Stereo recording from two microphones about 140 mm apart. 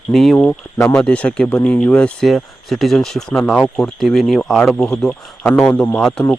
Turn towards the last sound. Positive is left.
turn(degrees=5)  # may be behind; listen again after turning